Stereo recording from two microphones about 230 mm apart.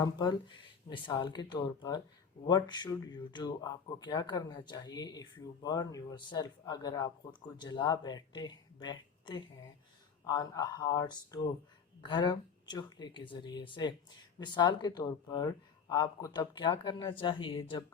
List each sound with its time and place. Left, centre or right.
0.0 s speech: centre